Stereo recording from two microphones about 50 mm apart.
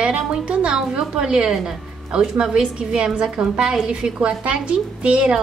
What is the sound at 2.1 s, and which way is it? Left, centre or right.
A woman's voice, centre.